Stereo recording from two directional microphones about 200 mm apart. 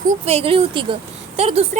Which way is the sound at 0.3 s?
30° right (ahead or behind).